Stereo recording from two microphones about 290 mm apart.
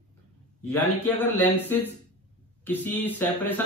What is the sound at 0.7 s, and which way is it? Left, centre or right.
A man's voice, centre.